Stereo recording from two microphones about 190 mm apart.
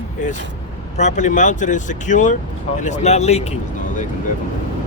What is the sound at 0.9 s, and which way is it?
Speech, 40° left (ahead or behind).